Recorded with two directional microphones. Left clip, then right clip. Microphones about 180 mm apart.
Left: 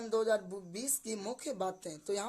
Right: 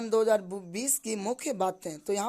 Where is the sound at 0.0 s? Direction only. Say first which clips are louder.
Right 7 dB; 45° right (ahead or behind).